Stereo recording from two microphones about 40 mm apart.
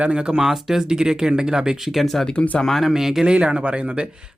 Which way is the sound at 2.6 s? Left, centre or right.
Centre.